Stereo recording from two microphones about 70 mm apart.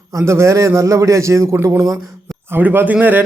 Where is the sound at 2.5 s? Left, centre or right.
Right.